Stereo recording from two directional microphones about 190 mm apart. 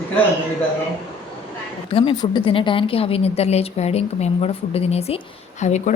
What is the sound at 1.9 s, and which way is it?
A woman's voice, 25° left (ahead or behind).